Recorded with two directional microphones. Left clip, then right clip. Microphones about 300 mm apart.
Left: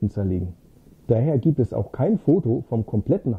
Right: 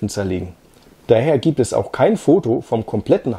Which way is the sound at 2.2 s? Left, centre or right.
Right.